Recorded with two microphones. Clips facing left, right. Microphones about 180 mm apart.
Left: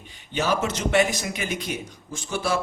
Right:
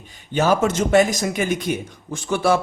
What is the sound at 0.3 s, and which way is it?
Speech, 50° right (ahead or behind).